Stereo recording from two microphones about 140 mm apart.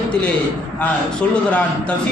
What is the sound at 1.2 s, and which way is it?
Speech, 10° left (ahead or behind).